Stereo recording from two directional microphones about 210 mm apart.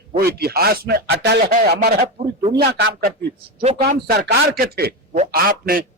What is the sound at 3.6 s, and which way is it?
Speech, 35° right (ahead or behind).